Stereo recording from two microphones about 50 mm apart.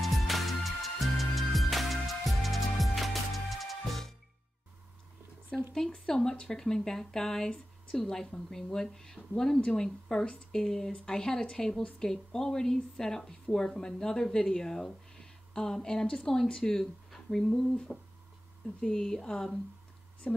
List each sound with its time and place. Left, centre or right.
0.0 s music: centre
5.8 s a woman's voice: centre
9.6 s a woman's voice: left